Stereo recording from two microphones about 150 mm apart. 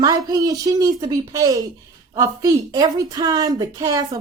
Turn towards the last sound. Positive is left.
turn(degrees=-25)  # may be behind; listen again after turning